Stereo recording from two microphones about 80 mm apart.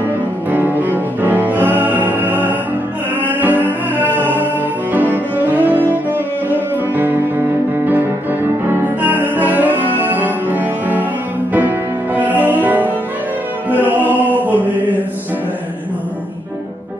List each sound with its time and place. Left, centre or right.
0.5 s music: right
5.1 s cello: right
7.0 s music: right